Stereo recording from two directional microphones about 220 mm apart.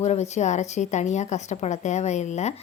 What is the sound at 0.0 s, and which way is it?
A woman's voice, 30° left (ahead or behind).